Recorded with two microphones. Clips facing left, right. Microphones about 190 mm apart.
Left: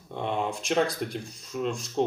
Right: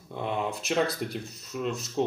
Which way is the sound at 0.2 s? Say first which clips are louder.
Left 1 dB; 5° right (ahead or behind).